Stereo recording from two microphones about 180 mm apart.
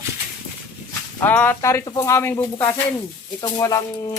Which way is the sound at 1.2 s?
10° left (ahead or behind).